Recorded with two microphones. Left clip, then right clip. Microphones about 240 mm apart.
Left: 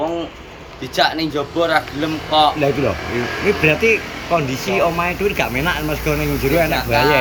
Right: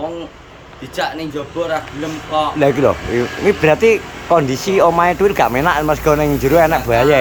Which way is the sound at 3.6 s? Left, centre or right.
Centre.